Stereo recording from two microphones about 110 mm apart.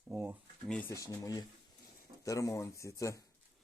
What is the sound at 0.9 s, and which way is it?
Speech, 30° left (ahead or behind).